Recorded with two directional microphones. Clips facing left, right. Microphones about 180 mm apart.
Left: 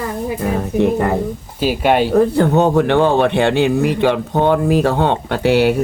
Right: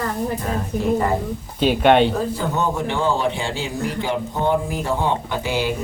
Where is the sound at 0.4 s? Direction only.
65° left (ahead or behind).